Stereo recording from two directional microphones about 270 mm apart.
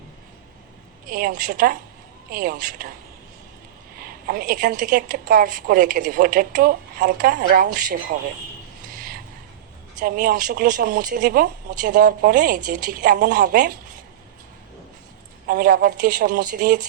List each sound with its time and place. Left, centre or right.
1.0 s a woman's voice: right
4.0 s a woman's voice: right
10.0 s a woman's voice: right
15.4 s a woman's voice: right